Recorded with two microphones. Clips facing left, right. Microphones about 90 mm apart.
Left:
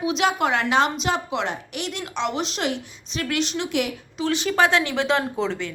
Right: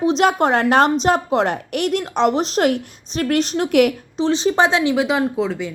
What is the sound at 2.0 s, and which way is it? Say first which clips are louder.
A woman's voice: right 5 dB; 40° right (ahead or behind).